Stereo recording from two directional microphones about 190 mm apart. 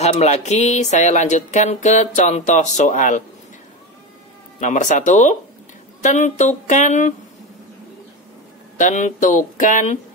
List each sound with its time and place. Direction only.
0.0 s speech: 35° left (ahead or behind)
4.6 s speech: 40° left (ahead or behind)
8.7 s speech: 40° left (ahead or behind)